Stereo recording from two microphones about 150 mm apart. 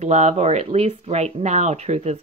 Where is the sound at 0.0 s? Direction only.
50° right (ahead or behind).